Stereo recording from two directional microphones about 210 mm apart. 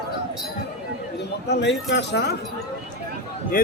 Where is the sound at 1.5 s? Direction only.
55° left (ahead or behind).